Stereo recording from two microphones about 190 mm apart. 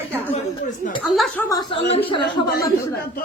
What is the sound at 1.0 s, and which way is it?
Speech, 5° left (ahead or behind).